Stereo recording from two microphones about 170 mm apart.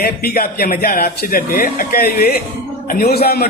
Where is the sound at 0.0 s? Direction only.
60° left (ahead or behind).